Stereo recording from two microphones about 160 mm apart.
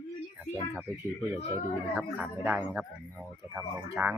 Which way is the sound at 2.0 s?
10° right (ahead or behind).